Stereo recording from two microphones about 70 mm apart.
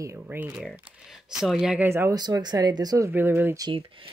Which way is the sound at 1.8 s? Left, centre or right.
Right.